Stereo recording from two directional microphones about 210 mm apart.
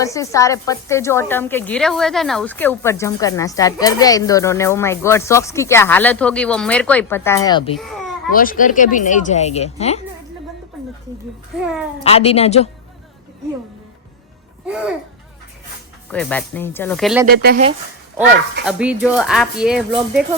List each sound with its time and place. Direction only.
0.0 s a woman's voice: 15° left (ahead or behind)
7.8 s a child's voice: centre (ahead or behind)
8.3 s speech: 40° left (ahead or behind)
11.5 s speech: 5° right (ahead or behind)
12.0 s a woman's voice: 30° left (ahead or behind)
16.0 s a woman's voice: 5° left (ahead or behind)
17.2 s speech: 45° right (ahead or behind)
18.6 s speech: 5° right (ahead or behind)